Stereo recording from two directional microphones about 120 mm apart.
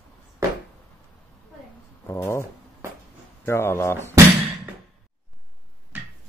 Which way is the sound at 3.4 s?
20° left (ahead or behind).